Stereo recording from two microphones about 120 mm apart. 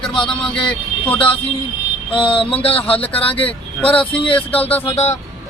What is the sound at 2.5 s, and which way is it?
Speech, 15° left (ahead or behind).